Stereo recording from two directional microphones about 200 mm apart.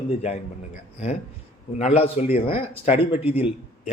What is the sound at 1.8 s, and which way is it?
A man's voice, 35° left (ahead or behind).